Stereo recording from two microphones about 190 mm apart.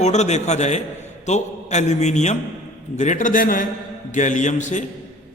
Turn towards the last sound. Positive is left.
turn(degrees=40)  # may be behind; listen again after turning